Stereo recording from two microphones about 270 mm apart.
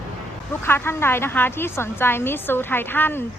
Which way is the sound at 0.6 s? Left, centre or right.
Centre.